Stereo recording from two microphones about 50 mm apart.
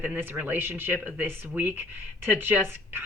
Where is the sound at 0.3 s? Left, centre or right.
Right.